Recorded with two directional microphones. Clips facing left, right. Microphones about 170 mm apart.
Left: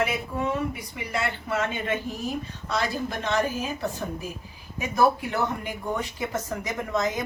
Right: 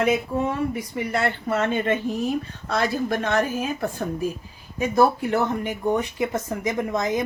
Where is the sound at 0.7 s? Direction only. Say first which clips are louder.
Right 6 dB; 45° right (ahead or behind).